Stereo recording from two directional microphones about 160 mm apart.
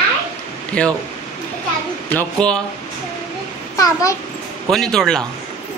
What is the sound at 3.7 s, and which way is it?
Speech, 20° left (ahead or behind).